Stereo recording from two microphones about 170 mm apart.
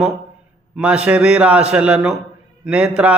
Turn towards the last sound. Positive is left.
turn(degrees=-5)  # may be behind; listen again after turning